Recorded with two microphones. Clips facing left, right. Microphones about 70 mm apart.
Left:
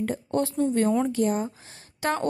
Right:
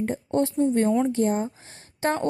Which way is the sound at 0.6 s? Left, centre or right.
Right.